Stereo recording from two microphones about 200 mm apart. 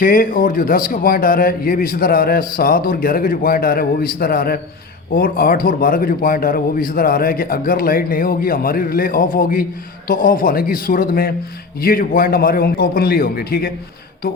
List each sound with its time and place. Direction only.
0.0 s speech: 45° left (ahead or behind)